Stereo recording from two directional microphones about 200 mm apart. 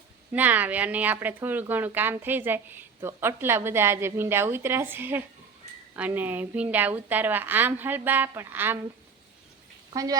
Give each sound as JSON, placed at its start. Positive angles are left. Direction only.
{"t": 0.3, "sound": "speech", "side_deg": -10}
{"t": 9.9, "sound": "speech", "side_deg": -20}